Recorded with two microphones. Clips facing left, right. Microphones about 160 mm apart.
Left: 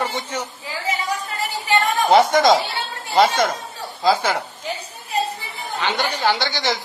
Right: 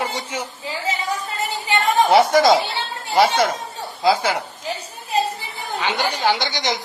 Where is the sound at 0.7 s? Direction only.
20° right (ahead or behind).